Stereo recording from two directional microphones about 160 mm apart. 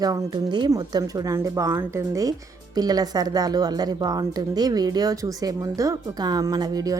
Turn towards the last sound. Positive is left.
turn(degrees=-25)  # may be behind; listen again after turning